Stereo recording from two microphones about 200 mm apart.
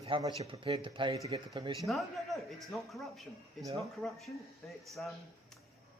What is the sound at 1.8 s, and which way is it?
A man's voice, centre (ahead or behind).